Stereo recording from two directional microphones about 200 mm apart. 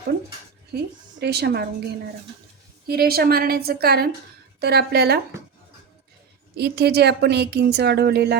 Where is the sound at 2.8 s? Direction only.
50° right (ahead or behind).